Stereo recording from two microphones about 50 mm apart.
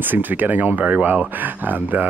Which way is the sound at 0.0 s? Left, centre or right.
Right.